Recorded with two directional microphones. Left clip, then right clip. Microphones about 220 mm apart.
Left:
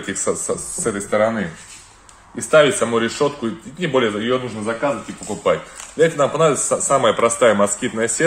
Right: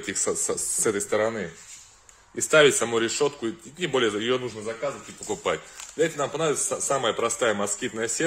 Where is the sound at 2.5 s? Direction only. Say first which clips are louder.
Left 5 dB; 45° right (ahead or behind).